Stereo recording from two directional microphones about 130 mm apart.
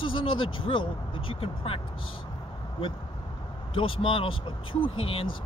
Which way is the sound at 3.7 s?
45° left (ahead or behind).